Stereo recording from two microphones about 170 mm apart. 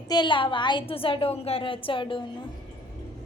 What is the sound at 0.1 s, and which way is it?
A woman's voice, 25° left (ahead or behind).